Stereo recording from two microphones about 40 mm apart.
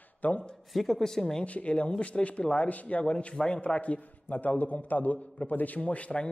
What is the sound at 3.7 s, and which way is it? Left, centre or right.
A man's voice, left.